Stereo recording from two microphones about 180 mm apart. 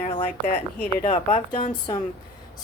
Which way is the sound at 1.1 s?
30° left (ahead or behind).